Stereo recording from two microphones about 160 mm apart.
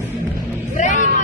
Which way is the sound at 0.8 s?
50° left (ahead or behind).